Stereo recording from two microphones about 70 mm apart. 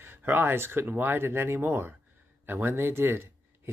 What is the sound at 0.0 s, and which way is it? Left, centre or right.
Speech, right.